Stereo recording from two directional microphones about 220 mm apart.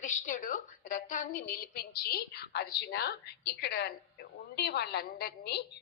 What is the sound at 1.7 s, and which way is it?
A woman's voice, 45° left (ahead or behind).